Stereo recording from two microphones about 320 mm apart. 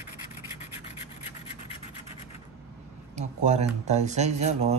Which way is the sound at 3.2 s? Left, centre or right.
Right.